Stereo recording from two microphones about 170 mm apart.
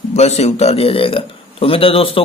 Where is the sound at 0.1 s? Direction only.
40° left (ahead or behind).